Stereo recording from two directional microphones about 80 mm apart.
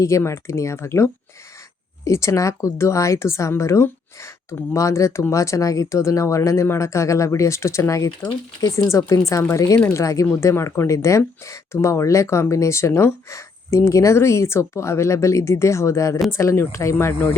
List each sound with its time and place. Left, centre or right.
0.0 s speech: left